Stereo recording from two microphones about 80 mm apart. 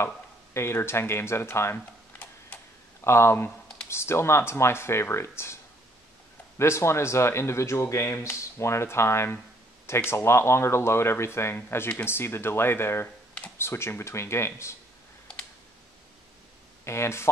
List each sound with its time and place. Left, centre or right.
0.6 s speech: left
3.0 s speech: left
6.6 s speech: left
16.8 s speech: left